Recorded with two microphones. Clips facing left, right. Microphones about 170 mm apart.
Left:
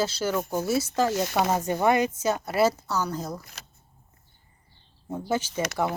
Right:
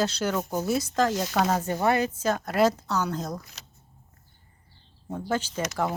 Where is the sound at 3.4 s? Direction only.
50° left (ahead or behind).